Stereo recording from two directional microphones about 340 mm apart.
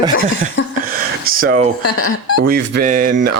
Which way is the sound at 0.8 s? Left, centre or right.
Right.